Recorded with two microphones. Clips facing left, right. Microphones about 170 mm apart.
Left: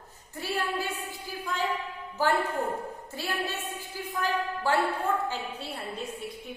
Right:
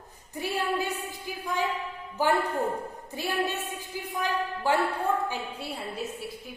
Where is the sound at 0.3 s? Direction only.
15° right (ahead or behind).